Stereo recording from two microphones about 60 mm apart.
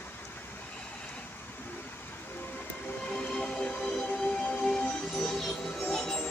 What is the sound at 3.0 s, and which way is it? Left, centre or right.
Music, centre.